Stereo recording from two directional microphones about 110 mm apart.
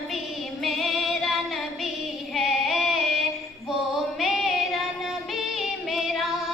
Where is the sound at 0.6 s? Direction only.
Centre (ahead or behind).